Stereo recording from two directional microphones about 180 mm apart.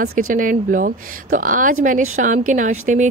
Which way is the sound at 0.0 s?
50° right (ahead or behind).